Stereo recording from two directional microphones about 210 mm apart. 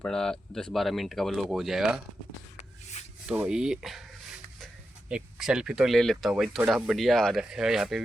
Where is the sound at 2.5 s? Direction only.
30° left (ahead or behind).